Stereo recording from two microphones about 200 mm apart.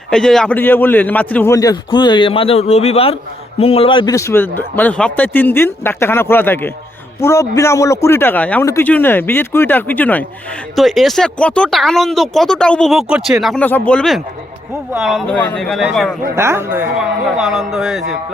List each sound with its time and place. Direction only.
0.1 s a man's voice: 5° left (ahead or behind)
16.3 s speech: 15° right (ahead or behind)